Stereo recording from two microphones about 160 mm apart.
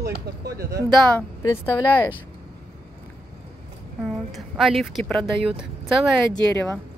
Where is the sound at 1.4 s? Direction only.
15° left (ahead or behind).